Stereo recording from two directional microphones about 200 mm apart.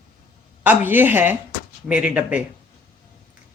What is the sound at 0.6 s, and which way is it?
Speech, 10° right (ahead or behind).